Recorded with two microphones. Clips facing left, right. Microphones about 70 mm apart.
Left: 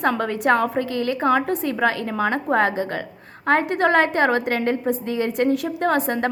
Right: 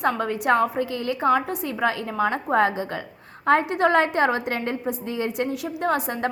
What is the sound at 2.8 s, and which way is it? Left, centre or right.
A woman's voice, left.